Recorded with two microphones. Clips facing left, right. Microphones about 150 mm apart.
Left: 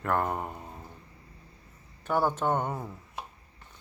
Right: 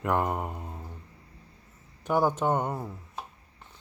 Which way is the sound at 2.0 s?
10° right (ahead or behind).